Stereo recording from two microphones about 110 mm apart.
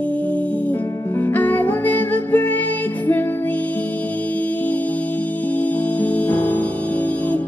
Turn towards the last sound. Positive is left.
turn(degrees=15)  # may be behind; listen again after turning